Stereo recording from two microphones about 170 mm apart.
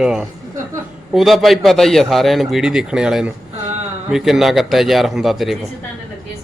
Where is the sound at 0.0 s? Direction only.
5° right (ahead or behind).